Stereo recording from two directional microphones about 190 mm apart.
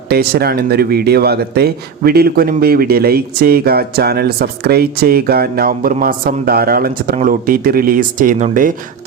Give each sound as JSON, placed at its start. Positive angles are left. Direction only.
{"t": 0.1, "sound": "speech", "side_deg": -55}